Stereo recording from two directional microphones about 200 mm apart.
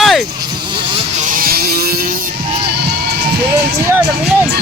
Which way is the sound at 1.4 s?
50° right (ahead or behind).